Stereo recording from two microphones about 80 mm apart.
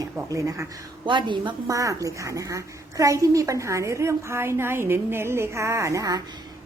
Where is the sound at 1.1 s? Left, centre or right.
Right.